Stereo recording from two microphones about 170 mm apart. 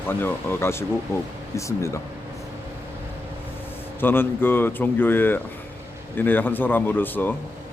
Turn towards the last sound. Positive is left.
turn(degrees=10)  # may be behind; listen again after turning